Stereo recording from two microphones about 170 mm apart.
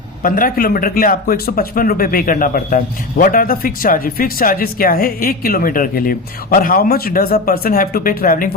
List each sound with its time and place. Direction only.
0.2 s speech: 55° left (ahead or behind)